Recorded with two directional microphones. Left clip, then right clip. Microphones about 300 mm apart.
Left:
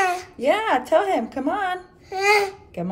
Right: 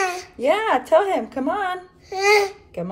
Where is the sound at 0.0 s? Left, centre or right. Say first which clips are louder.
Left 2 dB; centre.